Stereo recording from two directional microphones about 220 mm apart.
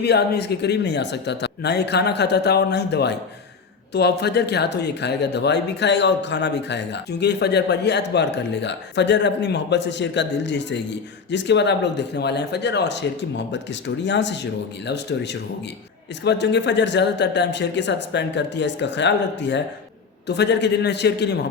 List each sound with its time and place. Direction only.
0.0 s speech: 50° left (ahead or behind)